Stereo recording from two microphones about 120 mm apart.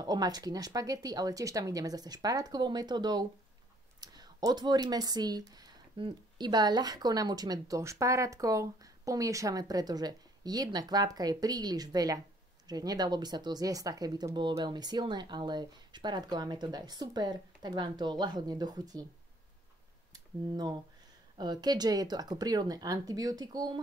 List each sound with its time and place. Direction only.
0.0 s speech: 35° right (ahead or behind)
20.1 s a sound: 35° right (ahead or behind)
21.4 s speech: 35° right (ahead or behind)